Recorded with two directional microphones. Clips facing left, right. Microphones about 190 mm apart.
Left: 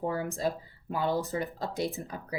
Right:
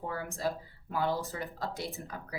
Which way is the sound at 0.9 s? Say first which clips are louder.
Left 3 dB; 20° left (ahead or behind).